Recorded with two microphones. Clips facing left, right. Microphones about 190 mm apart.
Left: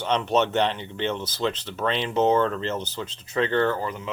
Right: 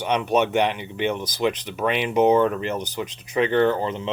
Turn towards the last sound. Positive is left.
turn(degrees=-25)  # may be behind; listen again after turning